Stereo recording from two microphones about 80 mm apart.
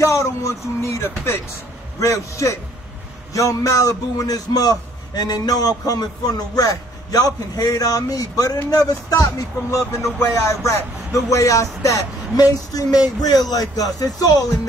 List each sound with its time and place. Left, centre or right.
0.0 s a man's voice: left